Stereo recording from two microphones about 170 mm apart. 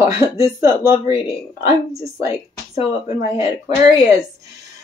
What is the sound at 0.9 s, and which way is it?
Speech, 30° left (ahead or behind).